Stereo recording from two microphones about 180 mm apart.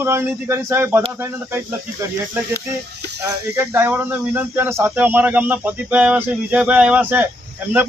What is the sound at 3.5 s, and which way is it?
Speech, 10° right (ahead or behind).